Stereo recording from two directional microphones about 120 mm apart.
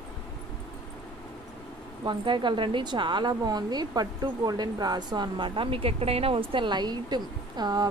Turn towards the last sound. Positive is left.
turn(degrees=-35)  # may be behind; listen again after turning